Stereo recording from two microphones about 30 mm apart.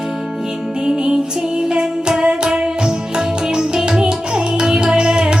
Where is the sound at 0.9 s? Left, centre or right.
Right.